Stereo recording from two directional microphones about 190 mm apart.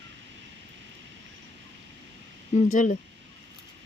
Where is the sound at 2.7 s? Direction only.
40° left (ahead or behind).